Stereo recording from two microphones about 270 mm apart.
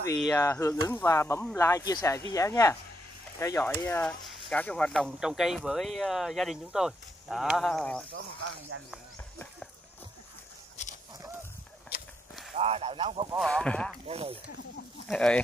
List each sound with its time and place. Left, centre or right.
0.3 s speech: centre
8.9 s snake: centre
10.8 s a sound: left
12.5 s speech: right
13.3 s speech: centre
14.0 s speech: right
15.0 s speech: centre